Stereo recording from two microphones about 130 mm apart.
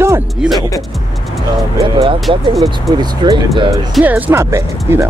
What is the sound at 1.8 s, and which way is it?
Speech, 45° right (ahead or behind).